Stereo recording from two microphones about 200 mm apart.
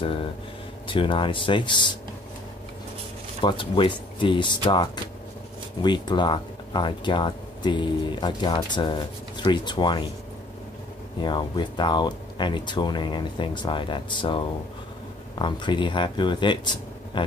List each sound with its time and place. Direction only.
0.0 s speech: 25° left (ahead or behind)
3.3 s speech: 25° left (ahead or behind)
11.1 s speech: 20° left (ahead or behind)